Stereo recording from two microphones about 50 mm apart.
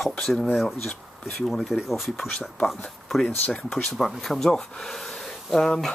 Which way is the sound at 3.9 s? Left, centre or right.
Centre.